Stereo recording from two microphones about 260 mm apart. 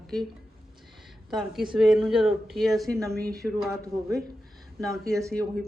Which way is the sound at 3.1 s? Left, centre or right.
Right.